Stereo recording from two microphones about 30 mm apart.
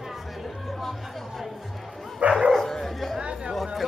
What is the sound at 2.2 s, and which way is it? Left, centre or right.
Dog, right.